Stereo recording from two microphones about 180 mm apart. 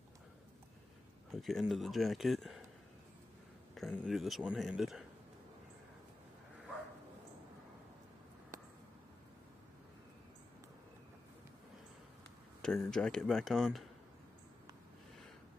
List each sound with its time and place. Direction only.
1.3 s speech: centre (ahead or behind)
3.7 s speech: 5° left (ahead or behind)
12.6 s speech: 5° left (ahead or behind)